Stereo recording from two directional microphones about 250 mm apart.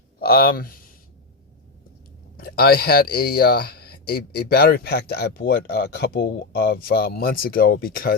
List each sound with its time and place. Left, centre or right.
0.2 s speech: left
2.4 s speech: left